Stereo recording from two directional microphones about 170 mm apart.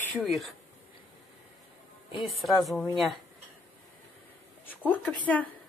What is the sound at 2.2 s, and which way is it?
Speech, centre (ahead or behind).